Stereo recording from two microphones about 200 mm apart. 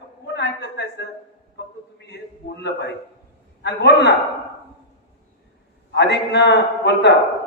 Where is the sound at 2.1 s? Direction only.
60° left (ahead or behind).